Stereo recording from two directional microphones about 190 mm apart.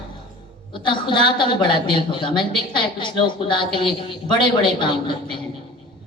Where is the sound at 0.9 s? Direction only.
25° left (ahead or behind).